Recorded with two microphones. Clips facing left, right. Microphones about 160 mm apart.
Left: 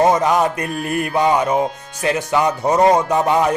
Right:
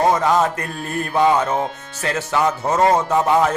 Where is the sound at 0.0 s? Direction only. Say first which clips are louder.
Left 2 dB; 20° left (ahead or behind).